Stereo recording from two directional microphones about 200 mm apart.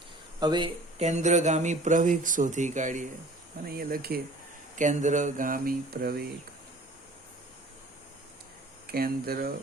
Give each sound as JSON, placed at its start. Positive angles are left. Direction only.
{"t": 0.3, "sound": "speech", "side_deg": -20}
{"t": 3.7, "sound": "speech", "side_deg": -50}
{"t": 4.7, "sound": "speech", "side_deg": -40}
{"t": 8.9, "sound": "speech", "side_deg": -50}